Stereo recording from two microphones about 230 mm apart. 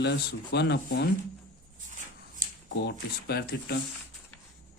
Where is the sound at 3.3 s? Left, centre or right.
Left.